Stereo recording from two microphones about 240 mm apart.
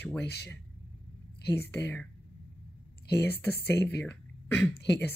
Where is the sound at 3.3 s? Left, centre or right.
Centre.